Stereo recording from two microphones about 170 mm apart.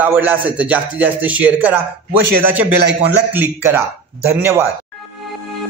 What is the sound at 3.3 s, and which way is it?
A man's voice, 10° right (ahead or behind).